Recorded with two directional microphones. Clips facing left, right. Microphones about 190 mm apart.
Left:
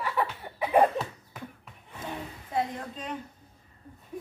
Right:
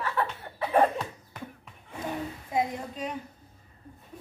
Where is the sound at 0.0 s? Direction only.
15° left (ahead or behind).